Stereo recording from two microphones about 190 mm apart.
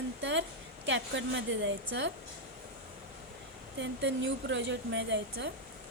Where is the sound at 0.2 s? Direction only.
70° right (ahead or behind).